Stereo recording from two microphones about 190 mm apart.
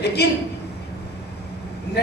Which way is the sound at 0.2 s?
60° left (ahead or behind).